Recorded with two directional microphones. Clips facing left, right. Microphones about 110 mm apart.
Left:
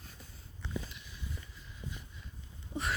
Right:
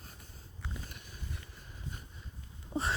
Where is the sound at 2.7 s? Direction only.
50° right (ahead or behind).